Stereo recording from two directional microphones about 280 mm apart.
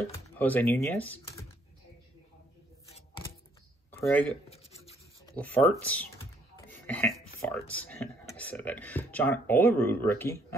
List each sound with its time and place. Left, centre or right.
0.4 s speech: centre
3.9 s speech: centre
4.5 s filing: left
5.4 s speech: centre